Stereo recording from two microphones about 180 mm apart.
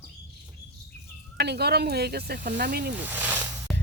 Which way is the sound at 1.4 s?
65° right (ahead or behind).